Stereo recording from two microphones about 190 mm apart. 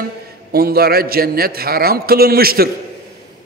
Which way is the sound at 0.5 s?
55° right (ahead or behind).